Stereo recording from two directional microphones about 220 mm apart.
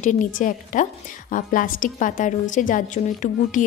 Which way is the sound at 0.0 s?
35° left (ahead or behind).